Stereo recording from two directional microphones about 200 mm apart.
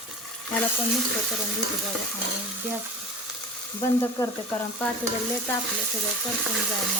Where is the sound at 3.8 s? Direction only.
15° left (ahead or behind).